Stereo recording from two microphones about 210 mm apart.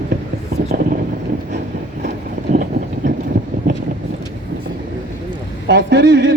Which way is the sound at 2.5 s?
35° right (ahead or behind).